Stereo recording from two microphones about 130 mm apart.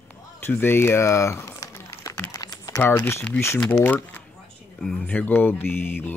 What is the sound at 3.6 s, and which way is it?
Speech, 10° left (ahead or behind).